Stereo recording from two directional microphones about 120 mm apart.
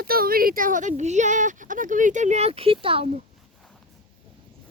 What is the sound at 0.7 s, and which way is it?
Speech, 80° right.